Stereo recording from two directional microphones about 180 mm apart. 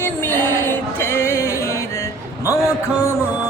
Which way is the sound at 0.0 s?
10° left (ahead or behind).